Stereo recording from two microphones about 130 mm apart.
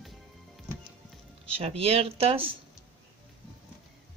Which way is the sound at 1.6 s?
50° right (ahead or behind).